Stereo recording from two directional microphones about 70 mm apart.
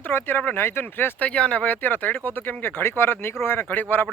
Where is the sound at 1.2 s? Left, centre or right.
Centre.